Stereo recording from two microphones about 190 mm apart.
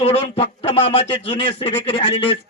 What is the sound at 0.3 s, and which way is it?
Speech, 30° left (ahead or behind).